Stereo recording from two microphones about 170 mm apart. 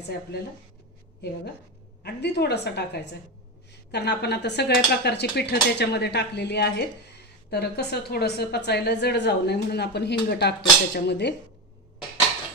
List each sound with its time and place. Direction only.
2.0 s a woman's voice: 75° left (ahead or behind)